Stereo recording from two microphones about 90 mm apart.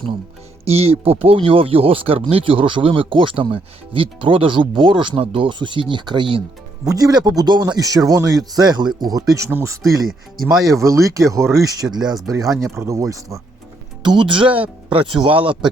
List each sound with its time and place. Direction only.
0.9 s speech: 90° right; by 6.4 s 65° right (ahead or behind)
6.8 s speech: 45° right (ahead or behind)
9.5 s speech: 25° right (ahead or behind)
10.8 s speech: 35° right (ahead or behind)
12.3 s speech: 40° right (ahead or behind)
14.0 s speech: 60° right (ahead or behind)